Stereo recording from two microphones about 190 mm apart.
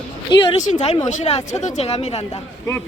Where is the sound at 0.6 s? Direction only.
40° left (ahead or behind).